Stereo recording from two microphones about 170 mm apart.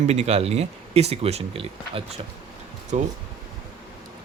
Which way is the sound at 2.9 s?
45° right (ahead or behind).